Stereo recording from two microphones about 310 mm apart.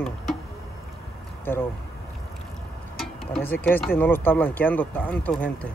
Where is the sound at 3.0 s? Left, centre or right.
Centre.